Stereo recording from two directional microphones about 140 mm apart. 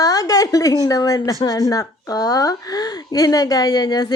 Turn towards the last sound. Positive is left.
turn(degrees=30)  # may be behind; listen again after turning